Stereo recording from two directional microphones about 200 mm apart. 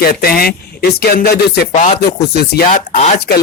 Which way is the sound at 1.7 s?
35° left (ahead or behind).